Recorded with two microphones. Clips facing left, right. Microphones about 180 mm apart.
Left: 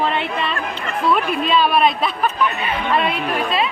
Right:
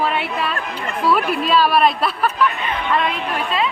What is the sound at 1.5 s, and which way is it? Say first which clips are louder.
Speech: right 1 dB; 5° right (ahead or behind).